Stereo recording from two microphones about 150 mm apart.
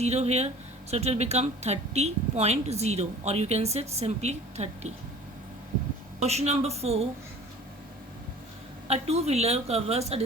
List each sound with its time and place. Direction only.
0.0 s speech: 45° right (ahead or behind)
6.1 s speech: 45° right (ahead or behind)
8.9 s speech: 45° right (ahead or behind)